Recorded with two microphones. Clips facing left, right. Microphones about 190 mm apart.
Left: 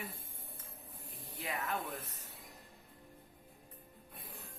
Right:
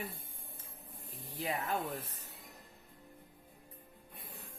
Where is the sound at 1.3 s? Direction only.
35° right (ahead or behind).